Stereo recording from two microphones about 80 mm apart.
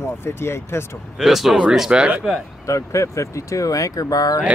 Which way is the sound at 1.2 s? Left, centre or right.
Centre.